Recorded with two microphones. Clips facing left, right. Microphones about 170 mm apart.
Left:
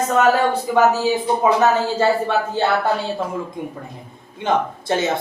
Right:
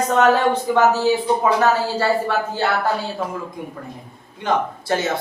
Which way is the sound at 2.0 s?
20° left (ahead or behind).